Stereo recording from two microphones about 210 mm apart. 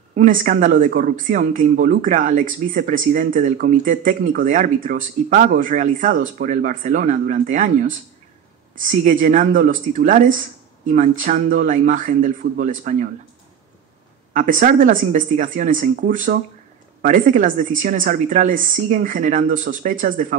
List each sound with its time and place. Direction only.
0.1 s speech: 40° right (ahead or behind)
14.3 s speech: 40° right (ahead or behind)